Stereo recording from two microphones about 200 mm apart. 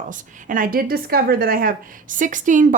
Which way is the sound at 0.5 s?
45° right (ahead or behind).